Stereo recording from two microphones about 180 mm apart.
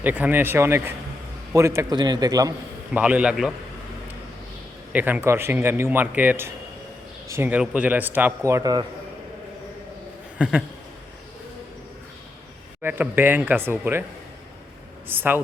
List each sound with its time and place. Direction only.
0.0 s a man's voice: 10° right (ahead or behind)
2.9 s a man's voice: 5° right (ahead or behind)
4.9 s a man's voice: 5° right (ahead or behind)
10.3 s speech: 5° right (ahead or behind)
12.8 s a man's voice: 10° right (ahead or behind)
15.1 s a man's voice: 10° right (ahead or behind)